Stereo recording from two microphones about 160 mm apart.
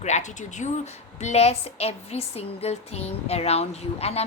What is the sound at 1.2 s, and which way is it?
A woman's voice, 45° left (ahead or behind).